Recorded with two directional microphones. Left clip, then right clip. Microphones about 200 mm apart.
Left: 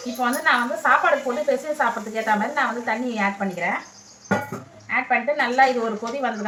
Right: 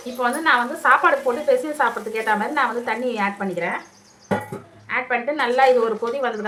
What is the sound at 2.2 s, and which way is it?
A woman's voice, 35° right (ahead or behind).